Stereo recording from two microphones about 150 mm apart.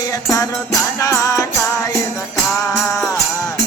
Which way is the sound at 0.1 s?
20° left (ahead or behind).